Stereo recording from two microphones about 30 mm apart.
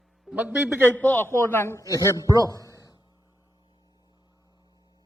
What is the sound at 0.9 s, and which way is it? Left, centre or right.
Speech, left.